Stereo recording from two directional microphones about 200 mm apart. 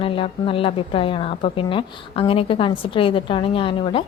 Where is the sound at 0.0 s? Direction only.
25° left (ahead or behind).